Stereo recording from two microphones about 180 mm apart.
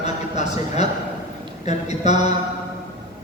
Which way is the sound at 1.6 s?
40° left (ahead or behind).